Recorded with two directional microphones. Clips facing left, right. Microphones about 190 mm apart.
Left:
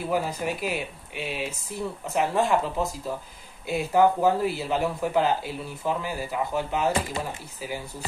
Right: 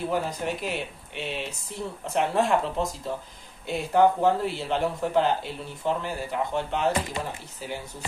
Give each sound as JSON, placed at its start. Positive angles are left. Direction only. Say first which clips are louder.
{"t": 0.1, "sound": "speech", "louder": "left 1 dB", "side_deg": 10}